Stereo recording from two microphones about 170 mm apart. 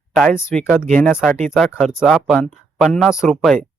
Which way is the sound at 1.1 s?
Centre (ahead or behind).